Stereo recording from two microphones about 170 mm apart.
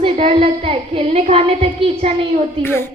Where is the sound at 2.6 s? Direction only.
15° left (ahead or behind).